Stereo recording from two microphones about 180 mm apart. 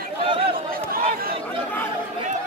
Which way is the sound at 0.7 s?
55° right (ahead or behind).